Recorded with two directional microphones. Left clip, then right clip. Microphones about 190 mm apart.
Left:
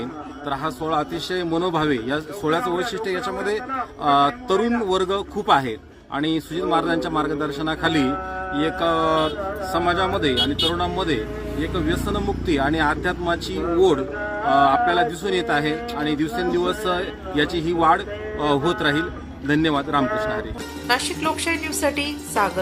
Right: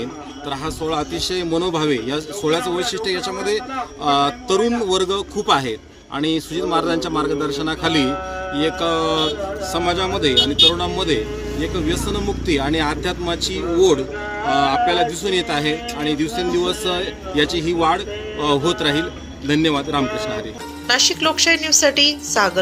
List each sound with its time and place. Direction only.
0.5 s speech: centre (ahead or behind)
4.0 s speech: 5° left (ahead or behind)
13.4 s speech: 25° left (ahead or behind)
14.5 s speech: centre (ahead or behind)
20.8 s a woman's voice: 15° right (ahead or behind)